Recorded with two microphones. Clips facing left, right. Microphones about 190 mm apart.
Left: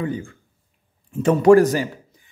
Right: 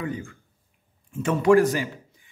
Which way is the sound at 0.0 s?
30° left (ahead or behind).